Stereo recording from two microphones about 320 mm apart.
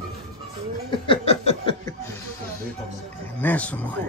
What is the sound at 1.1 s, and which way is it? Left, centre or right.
Laughter, centre.